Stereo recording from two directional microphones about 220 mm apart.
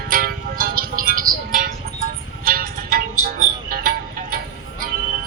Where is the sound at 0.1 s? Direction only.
40° right (ahead or behind).